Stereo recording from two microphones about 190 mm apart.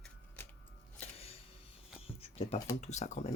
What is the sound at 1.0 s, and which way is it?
Music, 30° left (ahead or behind).